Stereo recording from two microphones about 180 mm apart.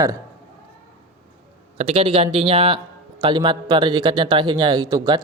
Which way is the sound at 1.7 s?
30° right (ahead or behind).